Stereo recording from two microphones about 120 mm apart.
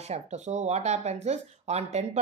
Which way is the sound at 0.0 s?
65° right (ahead or behind).